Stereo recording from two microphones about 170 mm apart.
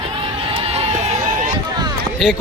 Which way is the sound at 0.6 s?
35° right (ahead or behind).